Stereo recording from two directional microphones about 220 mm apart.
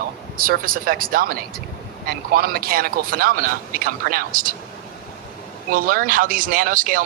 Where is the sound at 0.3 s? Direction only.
40° right (ahead or behind).